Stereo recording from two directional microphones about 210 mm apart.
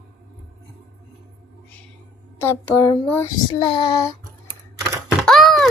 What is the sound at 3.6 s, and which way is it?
Child singing, 25° left (ahead or behind).